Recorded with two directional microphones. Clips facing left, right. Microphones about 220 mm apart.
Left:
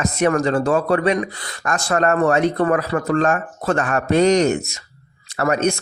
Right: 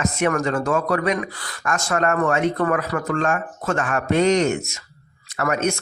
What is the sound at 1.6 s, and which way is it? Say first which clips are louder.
Speech: left 3 dB; 35° left (ahead or behind).